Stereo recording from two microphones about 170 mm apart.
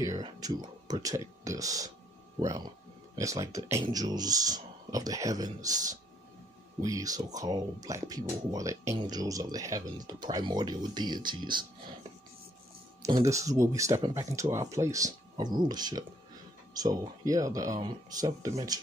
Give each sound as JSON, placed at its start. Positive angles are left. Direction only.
{"t": 0.0, "sound": "speech", "side_deg": -20}
{"t": 13.0, "sound": "speech", "side_deg": -20}